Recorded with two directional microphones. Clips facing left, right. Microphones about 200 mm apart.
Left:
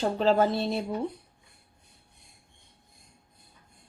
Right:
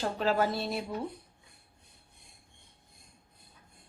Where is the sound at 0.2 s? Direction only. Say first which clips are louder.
Left 5 dB; 25° left (ahead or behind).